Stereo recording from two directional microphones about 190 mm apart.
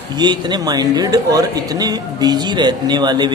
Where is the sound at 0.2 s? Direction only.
25° right (ahead or behind).